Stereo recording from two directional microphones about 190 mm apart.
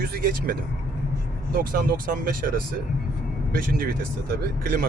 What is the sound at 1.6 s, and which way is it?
Speech, 50° right (ahead or behind).